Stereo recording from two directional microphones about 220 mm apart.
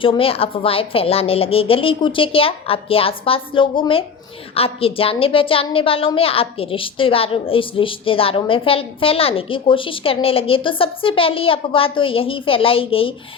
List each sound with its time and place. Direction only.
0.0 s a woman's voice: 25° left (ahead or behind)